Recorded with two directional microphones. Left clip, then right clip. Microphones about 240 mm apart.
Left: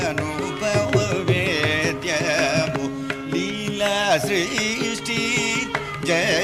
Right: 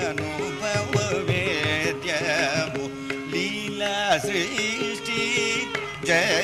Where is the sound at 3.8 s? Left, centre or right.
Centre.